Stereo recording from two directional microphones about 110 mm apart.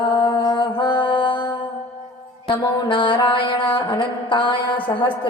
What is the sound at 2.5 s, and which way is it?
Mantra, 50° left (ahead or behind).